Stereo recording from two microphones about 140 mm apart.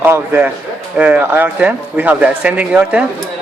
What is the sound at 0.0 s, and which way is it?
Speech, 15° right (ahead or behind).